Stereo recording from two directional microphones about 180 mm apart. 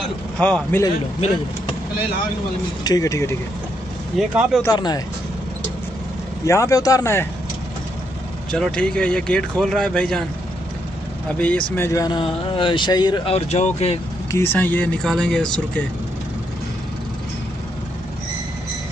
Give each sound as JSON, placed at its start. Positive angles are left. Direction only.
{"t": 0.4, "sound": "speech", "side_deg": 5}
{"t": 2.8, "sound": "speech", "side_deg": 20}
{"t": 4.2, "sound": "speech", "side_deg": 0}
{"t": 4.6, "sound": "speech", "side_deg": 20}
{"t": 6.4, "sound": "speech", "side_deg": 15}
{"t": 8.5, "sound": "speech", "side_deg": 5}
{"t": 11.3, "sound": "speech", "side_deg": 5}
{"t": 14.3, "sound": "speech", "side_deg": 10}